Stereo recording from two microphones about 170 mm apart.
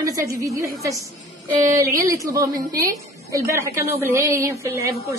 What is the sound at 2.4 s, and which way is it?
Speech, 55° right (ahead or behind).